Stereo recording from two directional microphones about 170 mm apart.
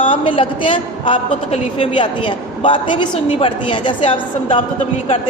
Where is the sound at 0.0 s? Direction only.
30° left (ahead or behind).